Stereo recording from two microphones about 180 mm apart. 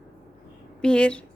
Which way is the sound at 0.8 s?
5° left (ahead or behind).